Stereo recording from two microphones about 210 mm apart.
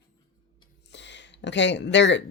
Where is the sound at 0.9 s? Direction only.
55° left (ahead or behind).